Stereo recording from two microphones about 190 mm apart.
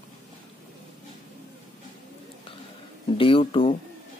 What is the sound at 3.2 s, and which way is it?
Speech, 25° left (ahead or behind).